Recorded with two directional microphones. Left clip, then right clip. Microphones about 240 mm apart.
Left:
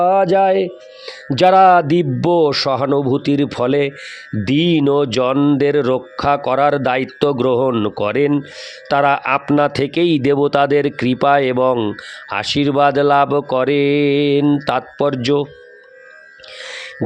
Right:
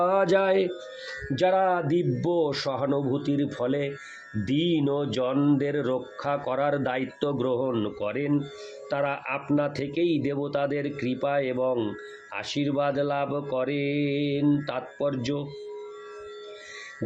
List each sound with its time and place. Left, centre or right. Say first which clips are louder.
0.0 s speech: left 10 dB; left
1.4 s speech: left 14 dB; left